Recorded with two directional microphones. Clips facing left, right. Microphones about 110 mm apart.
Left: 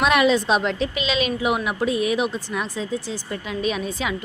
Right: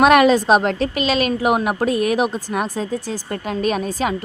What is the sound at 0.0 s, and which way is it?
A woman's voice, 50° right (ahead or behind).